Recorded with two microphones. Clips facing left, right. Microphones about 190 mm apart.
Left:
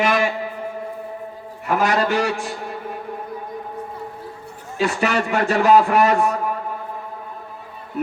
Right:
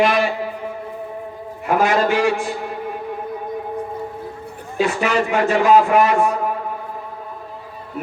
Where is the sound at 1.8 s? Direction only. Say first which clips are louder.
Right 2 dB; 40° left (ahead or behind).